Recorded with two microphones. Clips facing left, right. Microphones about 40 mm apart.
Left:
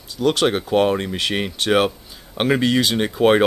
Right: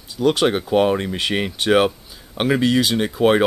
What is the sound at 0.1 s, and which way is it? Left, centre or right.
Speech, right.